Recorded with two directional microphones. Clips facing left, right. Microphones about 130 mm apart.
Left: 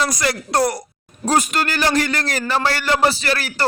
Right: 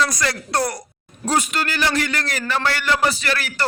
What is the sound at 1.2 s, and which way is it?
A man's voice, 45° left (ahead or behind).